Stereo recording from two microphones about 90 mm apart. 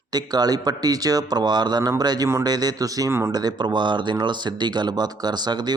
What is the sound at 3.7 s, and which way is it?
Speech, 60° right (ahead or behind).